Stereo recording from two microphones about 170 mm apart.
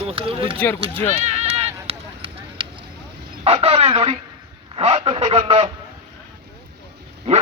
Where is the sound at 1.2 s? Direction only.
40° right (ahead or behind).